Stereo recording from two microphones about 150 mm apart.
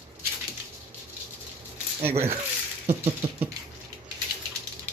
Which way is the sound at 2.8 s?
45° right (ahead or behind).